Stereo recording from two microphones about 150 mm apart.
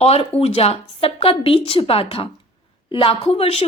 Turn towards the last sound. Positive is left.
turn(degrees=40)  # may be behind; listen again after turning